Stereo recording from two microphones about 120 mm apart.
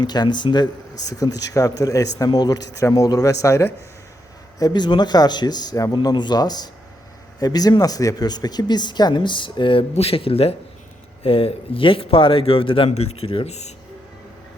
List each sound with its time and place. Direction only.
0.0 s speech: 35° left (ahead or behind)
4.6 s speech: 40° left (ahead or behind)
9.9 s speech: 55° left (ahead or behind)
12.9 s speech: 60° left (ahead or behind)